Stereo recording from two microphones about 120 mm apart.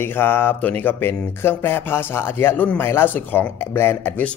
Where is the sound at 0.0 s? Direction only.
20° left (ahead or behind).